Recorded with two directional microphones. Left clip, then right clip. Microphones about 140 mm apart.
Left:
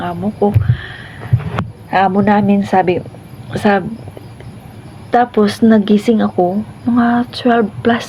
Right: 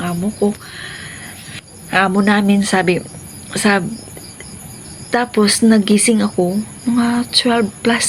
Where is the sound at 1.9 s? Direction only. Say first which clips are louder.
Left 2 dB; 25° right (ahead or behind).